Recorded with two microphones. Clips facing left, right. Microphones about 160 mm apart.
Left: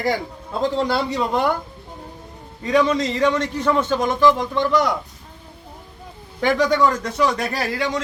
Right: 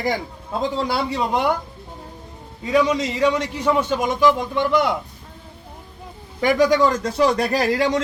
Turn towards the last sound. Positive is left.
turn(degrees=-40)  # may be behind; listen again after turning